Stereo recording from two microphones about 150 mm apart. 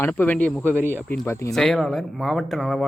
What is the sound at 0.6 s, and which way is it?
Speech, 15° right (ahead or behind).